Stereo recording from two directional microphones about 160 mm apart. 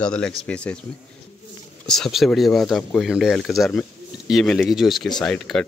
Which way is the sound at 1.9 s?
Centre (ahead or behind).